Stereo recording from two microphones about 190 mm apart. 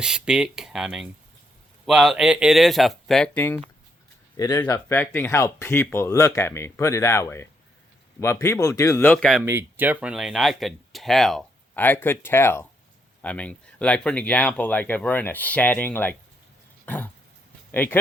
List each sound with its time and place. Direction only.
0.0 s speech: 5° right (ahead or behind)
4.4 s speech: 20° left (ahead or behind)
9.2 s speech: 10° right (ahead or behind); by 16.1 s 10° left (ahead or behind)
16.8 s throat clearing: 10° left (ahead or behind)
17.7 s speech: 10° left (ahead or behind)